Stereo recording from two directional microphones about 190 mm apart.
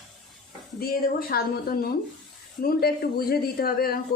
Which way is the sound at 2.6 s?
55° left (ahead or behind).